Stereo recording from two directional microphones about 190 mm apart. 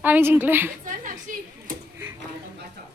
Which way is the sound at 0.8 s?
45° right (ahead or behind).